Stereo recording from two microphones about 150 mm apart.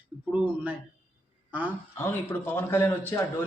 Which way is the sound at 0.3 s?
10° right (ahead or behind).